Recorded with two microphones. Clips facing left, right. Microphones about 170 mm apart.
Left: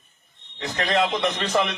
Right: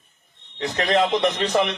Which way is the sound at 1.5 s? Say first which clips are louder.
Right 2 dB; 10° right (ahead or behind).